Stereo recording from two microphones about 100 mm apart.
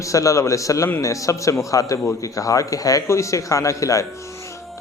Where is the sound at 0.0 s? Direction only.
35° left (ahead or behind).